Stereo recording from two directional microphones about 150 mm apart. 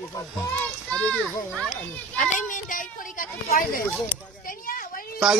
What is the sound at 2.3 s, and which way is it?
Speech, 60° left (ahead or behind).